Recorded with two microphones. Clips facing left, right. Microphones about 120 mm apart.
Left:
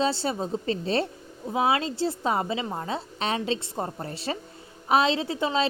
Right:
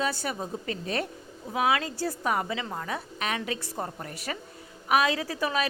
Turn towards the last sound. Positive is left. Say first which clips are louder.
# left 3 dB
turn(degrees=25)  # may be behind; listen again after turning